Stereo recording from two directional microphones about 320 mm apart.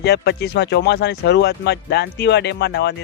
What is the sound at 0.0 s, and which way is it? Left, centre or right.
Speech, left.